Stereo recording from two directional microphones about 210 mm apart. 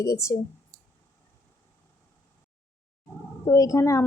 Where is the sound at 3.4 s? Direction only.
15° left (ahead or behind).